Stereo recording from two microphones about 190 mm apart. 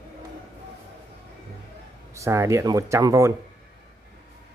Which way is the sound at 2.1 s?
15° right (ahead or behind).